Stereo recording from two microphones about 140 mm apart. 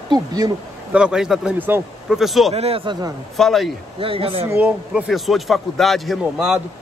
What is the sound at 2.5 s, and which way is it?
Speech, 45° right (ahead or behind).